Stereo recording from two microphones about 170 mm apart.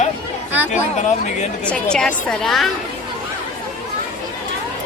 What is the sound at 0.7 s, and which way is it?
Speech, 45° left (ahead or behind).